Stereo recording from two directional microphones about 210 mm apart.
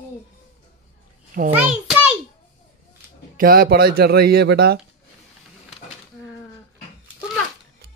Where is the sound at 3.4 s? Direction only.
45° right (ahead or behind).